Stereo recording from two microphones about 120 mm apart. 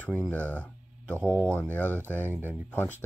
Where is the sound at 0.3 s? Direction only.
10° left (ahead or behind).